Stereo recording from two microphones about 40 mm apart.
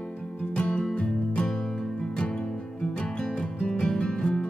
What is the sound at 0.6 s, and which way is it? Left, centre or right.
Music, centre.